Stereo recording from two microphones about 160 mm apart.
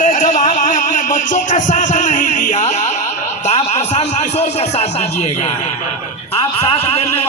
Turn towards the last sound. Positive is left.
turn(degrees=40)  # may be behind; listen again after turning